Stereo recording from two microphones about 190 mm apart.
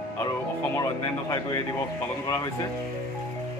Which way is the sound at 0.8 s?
15° left (ahead or behind).